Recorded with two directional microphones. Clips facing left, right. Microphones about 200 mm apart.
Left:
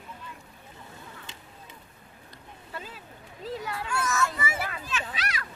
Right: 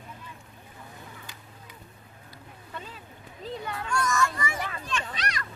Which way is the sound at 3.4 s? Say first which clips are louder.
Left 1 dB; centre (ahead or behind).